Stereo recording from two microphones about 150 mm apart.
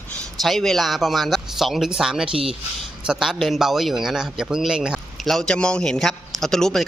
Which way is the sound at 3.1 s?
5° right (ahead or behind).